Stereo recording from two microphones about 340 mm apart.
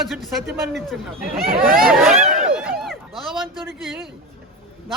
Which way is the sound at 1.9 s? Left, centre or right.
Centre.